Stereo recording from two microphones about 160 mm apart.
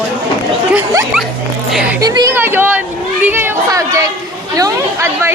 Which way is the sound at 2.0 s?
25° right (ahead or behind).